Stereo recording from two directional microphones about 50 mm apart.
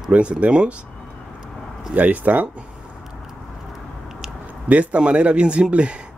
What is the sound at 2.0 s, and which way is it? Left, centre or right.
Speech, right.